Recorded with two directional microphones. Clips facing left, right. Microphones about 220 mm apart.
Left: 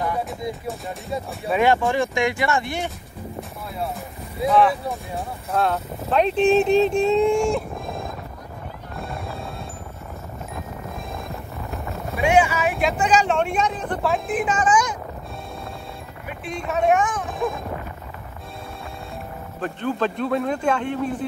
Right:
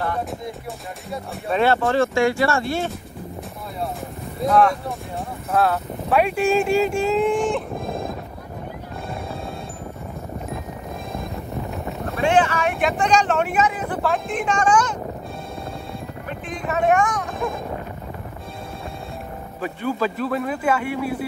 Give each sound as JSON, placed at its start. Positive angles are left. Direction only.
{"t": 0.3, "sound": "speech", "side_deg": 0}
{"t": 1.6, "sound": "speech", "side_deg": 15}
{"t": 4.4, "sound": "speech", "side_deg": 0}
{"t": 11.7, "sound": "speech", "side_deg": 5}
{"t": 16.3, "sound": "speech", "side_deg": 0}
{"t": 19.6, "sound": "speech", "side_deg": -10}